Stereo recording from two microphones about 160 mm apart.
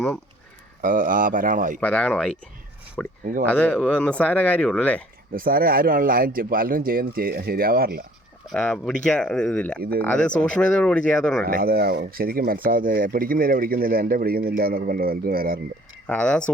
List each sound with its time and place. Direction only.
0.8 s speech: 60° right (ahead or behind)
1.8 s speech: 5° left (ahead or behind)
5.3 s speech: 65° right (ahead or behind)
8.5 s speech: 5° left (ahead or behind)
11.4 s speech: 70° right (ahead or behind)
16.0 s speech: 5° left (ahead or behind)